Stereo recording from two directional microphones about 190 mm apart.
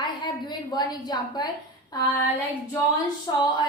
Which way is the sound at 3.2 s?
20° left (ahead or behind).